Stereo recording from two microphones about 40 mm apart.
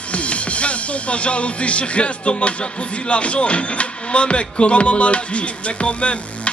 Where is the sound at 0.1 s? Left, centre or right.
Left.